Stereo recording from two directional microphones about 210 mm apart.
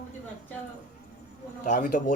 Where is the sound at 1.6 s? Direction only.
40° left (ahead or behind).